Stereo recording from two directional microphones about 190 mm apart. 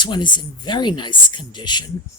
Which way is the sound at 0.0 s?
25° left (ahead or behind).